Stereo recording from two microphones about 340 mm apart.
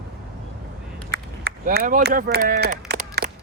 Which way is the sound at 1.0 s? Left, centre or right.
Right.